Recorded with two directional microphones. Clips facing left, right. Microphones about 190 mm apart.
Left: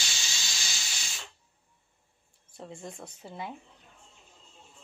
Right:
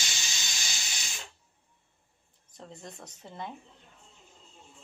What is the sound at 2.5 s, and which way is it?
Speech, 5° left (ahead or behind).